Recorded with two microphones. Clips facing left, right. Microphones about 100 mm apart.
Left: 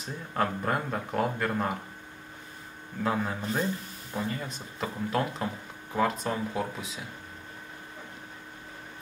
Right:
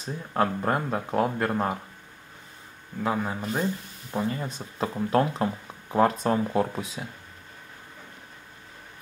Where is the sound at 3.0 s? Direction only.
10° right (ahead or behind).